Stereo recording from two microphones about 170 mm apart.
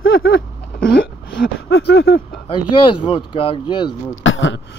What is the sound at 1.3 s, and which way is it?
Speech, 85° left.